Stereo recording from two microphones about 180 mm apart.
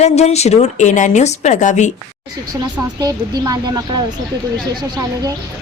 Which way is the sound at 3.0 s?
20° right (ahead or behind).